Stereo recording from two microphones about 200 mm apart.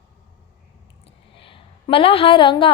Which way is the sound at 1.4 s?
25° left (ahead or behind).